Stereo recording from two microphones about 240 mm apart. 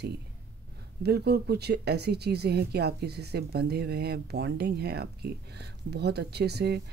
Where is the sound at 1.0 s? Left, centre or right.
Right.